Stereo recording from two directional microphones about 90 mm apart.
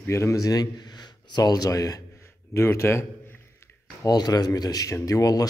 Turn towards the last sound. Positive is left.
turn(degrees=40)  # may be behind; listen again after turning